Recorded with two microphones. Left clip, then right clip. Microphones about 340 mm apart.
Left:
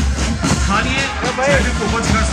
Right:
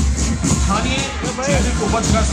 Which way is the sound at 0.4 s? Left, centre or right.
Left.